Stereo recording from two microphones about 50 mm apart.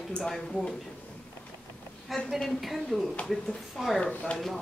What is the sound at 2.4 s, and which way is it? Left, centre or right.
Speech, centre.